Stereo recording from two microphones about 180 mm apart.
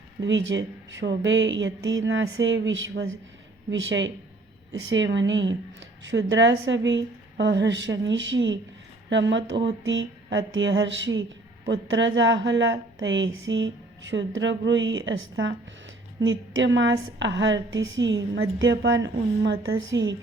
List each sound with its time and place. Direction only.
0.2 s a woman's voice: 90° right